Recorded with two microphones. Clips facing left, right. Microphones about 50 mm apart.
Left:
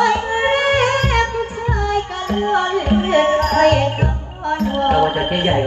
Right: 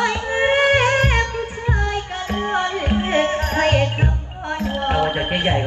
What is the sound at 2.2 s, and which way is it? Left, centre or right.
Music, right.